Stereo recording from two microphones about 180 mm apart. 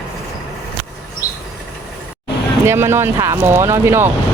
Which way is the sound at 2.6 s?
15° right (ahead or behind).